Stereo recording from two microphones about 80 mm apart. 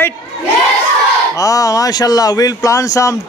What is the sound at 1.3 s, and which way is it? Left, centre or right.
Speech, left.